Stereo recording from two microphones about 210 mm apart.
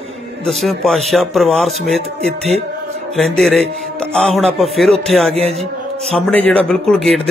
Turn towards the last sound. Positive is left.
turn(degrees=0)  # may be behind; listen again after turning